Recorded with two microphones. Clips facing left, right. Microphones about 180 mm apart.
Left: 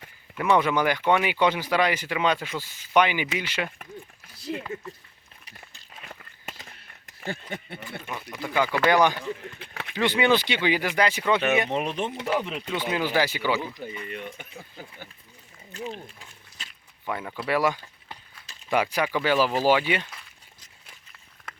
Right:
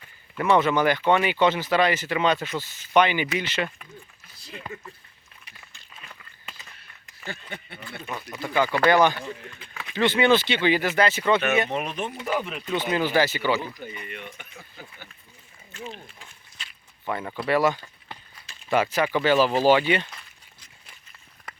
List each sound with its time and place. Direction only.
0.5 s speech: 10° left (ahead or behind)
5.5 s a sound: 40° left (ahead or behind)
8.4 s speech: 10° left (ahead or behind)
9.6 s a sound: 60° left (ahead or behind)
9.9 s speech: 15° left (ahead or behind)
11.7 s speech: 30° left (ahead or behind)
12.7 s speech: 10° left (ahead or behind)
13.7 s speech: 30° left (ahead or behind)
16.6 s a sound: 45° left (ahead or behind)
17.1 s speech: 10° left (ahead or behind)